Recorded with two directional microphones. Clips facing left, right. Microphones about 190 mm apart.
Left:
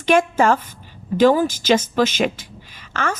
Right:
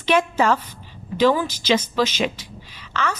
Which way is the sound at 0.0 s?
50° left (ahead or behind).